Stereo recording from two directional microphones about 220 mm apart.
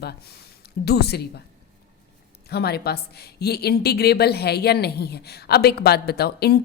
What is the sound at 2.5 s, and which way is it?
A woman's voice, 45° left (ahead or behind).